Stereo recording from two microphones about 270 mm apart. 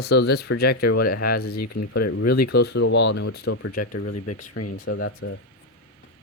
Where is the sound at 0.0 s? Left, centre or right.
Left.